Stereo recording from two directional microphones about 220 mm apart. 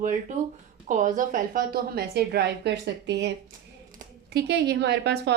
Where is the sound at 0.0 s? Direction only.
35° right (ahead or behind).